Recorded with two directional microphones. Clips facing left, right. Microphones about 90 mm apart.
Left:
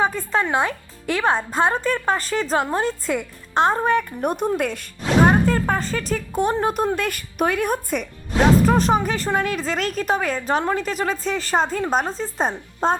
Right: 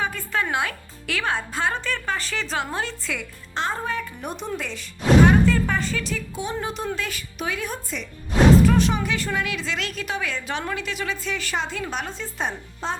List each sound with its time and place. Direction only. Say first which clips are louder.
0.0 s a woman's voice: left 5 dB; 30° left (ahead or behind); by 8.0 s 55° left (ahead or behind)
8.6 s a woman's voice: left 3 dB; 40° left (ahead or behind)